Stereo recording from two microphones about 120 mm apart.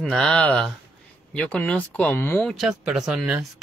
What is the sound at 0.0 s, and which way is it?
Speech, 5° left (ahead or behind).